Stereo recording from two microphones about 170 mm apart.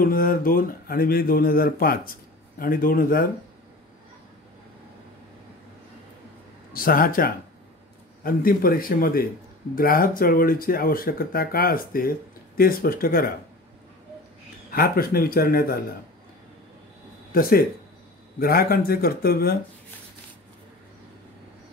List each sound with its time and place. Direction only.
0.0 s speech: 55° left (ahead or behind)
6.7 s speech: 55° left (ahead or behind)
14.7 s speech: 60° left (ahead or behind)
17.3 s speech: 60° left (ahead or behind)